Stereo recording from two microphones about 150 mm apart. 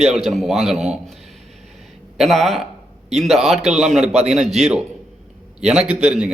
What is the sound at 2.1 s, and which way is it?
A man's voice, centre (ahead or behind).